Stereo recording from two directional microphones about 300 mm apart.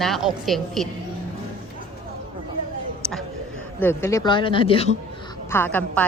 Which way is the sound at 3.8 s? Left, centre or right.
Centre.